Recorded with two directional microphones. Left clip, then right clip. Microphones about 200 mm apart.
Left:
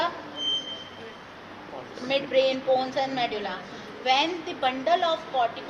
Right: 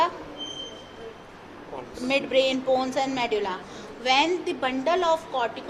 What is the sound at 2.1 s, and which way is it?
A woman's voice, 60° right (ahead or behind).